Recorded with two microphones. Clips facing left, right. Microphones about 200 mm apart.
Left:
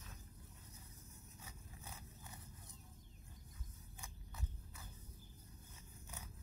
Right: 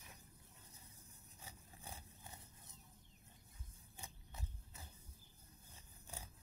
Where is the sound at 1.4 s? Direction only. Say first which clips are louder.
Right 2 dB; 30° right (ahead or behind).